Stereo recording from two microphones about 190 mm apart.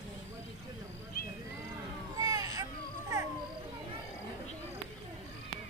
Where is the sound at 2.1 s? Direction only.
20° right (ahead or behind).